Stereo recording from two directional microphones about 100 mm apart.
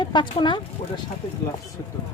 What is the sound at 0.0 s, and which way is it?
Speech, 55° left (ahead or behind).